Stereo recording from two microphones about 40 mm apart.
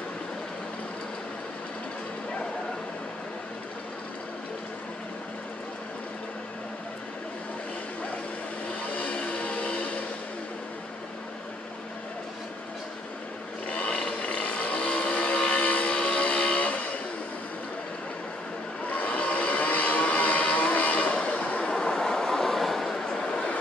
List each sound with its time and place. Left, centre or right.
8.8 s vehicle: left
13.7 s vehicle: left
18.9 s vehicle: left
21.6 s a sound: centre